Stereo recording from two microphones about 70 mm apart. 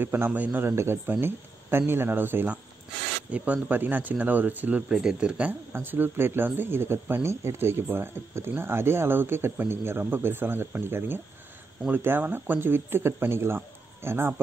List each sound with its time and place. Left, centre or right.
0.0 s speech: right
3.3 s speech: centre
4.9 s speech: centre
5.4 s speech: right